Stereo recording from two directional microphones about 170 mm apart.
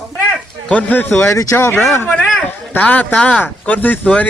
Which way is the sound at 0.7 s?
10° left (ahead or behind).